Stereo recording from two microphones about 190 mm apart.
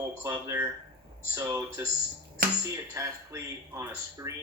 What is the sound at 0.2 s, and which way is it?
Speech, 15° right (ahead or behind).